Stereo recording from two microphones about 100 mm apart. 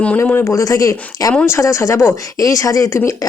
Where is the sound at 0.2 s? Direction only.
25° left (ahead or behind).